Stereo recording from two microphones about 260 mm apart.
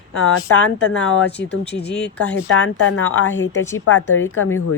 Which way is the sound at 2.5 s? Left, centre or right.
Left.